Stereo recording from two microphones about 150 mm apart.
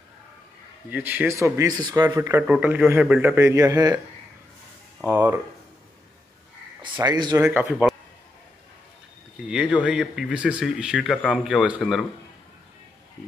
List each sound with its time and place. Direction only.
0.8 s a man's voice: 10° right (ahead or behind)
5.0 s speech: 20° right (ahead or behind)
7.0 s speech: 25° right (ahead or behind)
7.4 s a man's voice: 5° right (ahead or behind)
9.5 s a man's voice: 5° right (ahead or behind)